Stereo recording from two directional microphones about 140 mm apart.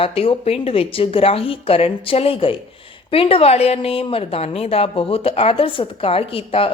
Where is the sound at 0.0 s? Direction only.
45° left (ahead or behind).